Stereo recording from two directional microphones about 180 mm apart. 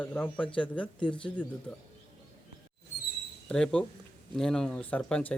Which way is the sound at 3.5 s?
5° left (ahead or behind).